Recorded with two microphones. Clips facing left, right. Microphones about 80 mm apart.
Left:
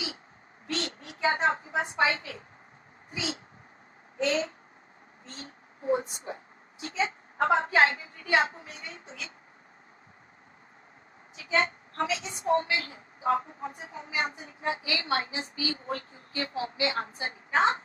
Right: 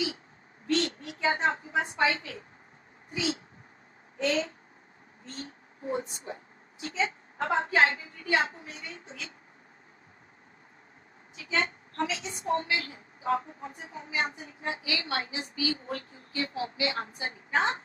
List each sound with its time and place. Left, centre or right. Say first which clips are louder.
0.7 s a sound: right 6 dB; left
2.0 s a woman's voice: left 1 dB; left
4.3 s a woman's voice: right 1 dB; left
11.3 s a woman's voice: left 3 dB; left